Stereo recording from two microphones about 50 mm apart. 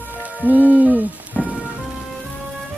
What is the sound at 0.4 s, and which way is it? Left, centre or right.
Hoot, right.